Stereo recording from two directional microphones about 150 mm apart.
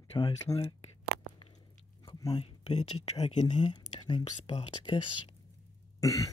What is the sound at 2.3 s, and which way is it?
Speech, 45° left (ahead or behind).